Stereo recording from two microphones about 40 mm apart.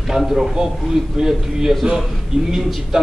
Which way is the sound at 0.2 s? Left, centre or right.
Centre.